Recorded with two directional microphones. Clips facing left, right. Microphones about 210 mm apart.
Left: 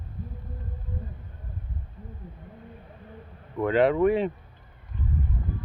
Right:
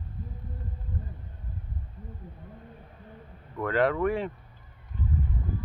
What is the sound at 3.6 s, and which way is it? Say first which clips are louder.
Speech: left 4 dB; 20° left (ahead or behind).